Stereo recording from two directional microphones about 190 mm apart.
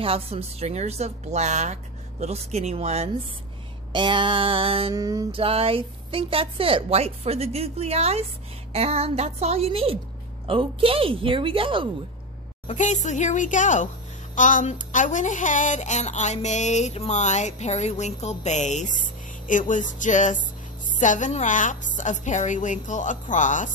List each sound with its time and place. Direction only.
0.0 s a woman's voice: 30° right (ahead or behind)
5.0 s a woman's voice: 20° right (ahead or behind)
5.4 s a woman's voice: 30° right (ahead or behind)
12.6 s speech: 40° left (ahead or behind)